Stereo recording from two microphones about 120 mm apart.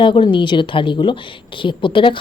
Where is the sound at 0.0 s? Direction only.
45° left (ahead or behind).